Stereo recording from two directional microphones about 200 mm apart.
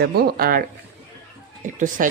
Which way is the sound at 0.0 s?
50° right (ahead or behind).